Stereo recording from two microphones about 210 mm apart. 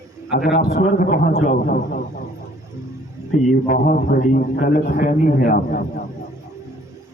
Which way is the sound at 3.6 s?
45° left (ahead or behind).